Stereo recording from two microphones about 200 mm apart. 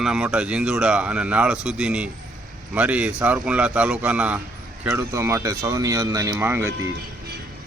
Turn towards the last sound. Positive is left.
turn(degrees=-10)  # may be behind; listen again after turning